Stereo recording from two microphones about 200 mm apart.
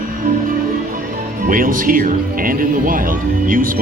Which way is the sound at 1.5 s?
45° right (ahead or behind).